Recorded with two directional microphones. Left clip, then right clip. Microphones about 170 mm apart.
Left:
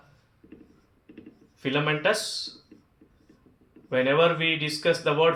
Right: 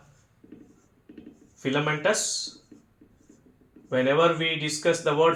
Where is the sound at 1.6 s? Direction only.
15° right (ahead or behind).